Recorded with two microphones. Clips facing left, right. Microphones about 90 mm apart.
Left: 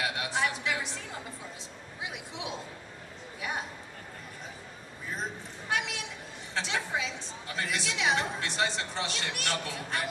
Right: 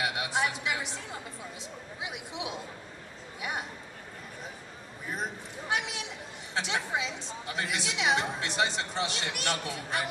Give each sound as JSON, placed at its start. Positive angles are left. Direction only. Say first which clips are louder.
{"t": 0.0, "sound": "a sound", "louder": "right 1 dB", "side_deg": -20}
{"t": 2.0, "sound": "a woman's voice", "louder": "right 1 dB", "side_deg": -20}
{"t": 5.6, "sound": "a woman's voice", "louder": "even", "side_deg": -20}